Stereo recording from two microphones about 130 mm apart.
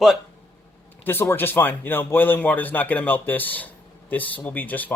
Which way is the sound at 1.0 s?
15° left (ahead or behind).